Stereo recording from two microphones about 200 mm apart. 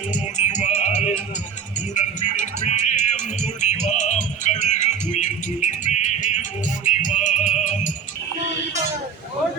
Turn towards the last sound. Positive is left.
turn(degrees=40)  # may be behind; listen again after turning